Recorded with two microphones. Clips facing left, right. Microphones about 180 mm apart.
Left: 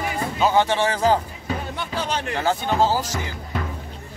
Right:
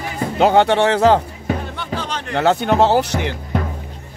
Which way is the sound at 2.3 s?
70° right (ahead or behind).